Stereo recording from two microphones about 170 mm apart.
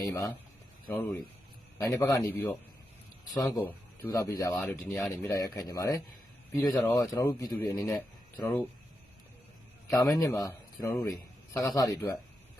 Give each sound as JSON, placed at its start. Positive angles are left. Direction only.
{"t": 0.0, "sound": "speech", "side_deg": 15}
{"t": 1.8, "sound": "speech", "side_deg": 20}
{"t": 4.5, "sound": "speech", "side_deg": 10}
{"t": 5.1, "sound": "speech", "side_deg": 20}
{"t": 7.8, "sound": "a man's voice", "side_deg": 0}
{"t": 8.4, "sound": "speech", "side_deg": 15}
{"t": 9.9, "sound": "a man's voice", "side_deg": 20}